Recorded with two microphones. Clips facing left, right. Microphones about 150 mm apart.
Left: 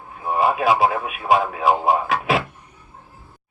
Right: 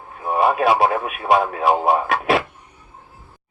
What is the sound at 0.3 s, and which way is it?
Radio, 50° right (ahead or behind).